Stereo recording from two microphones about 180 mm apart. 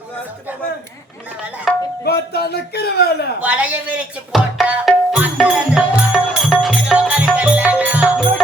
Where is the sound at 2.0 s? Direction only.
60° left (ahead or behind).